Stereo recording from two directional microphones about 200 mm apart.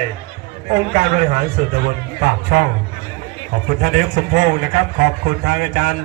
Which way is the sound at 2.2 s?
55° right (ahead or behind).